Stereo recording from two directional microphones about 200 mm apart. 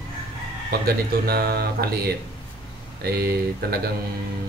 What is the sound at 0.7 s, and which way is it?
Speech, 50° right (ahead or behind).